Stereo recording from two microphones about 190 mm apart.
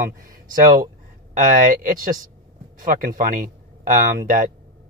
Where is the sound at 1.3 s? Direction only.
45° right (ahead or behind).